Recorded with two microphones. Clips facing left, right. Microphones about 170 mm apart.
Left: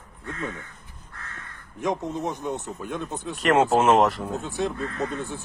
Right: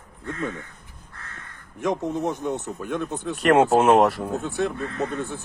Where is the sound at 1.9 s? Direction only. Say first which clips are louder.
Right 5 dB; 60° right (ahead or behind).